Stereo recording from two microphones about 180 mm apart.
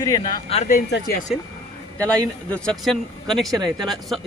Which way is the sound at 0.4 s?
35° left (ahead or behind).